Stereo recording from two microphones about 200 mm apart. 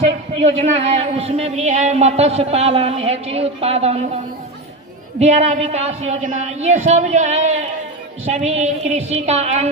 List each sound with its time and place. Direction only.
0.0 s a man's voice: 35° right (ahead or behind)
5.2 s a man's voice: 35° right (ahead or behind)